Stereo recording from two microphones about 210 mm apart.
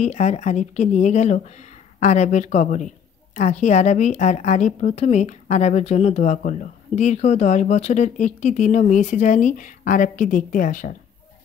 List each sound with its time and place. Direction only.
0.0 s a woman's voice: 35° left (ahead or behind)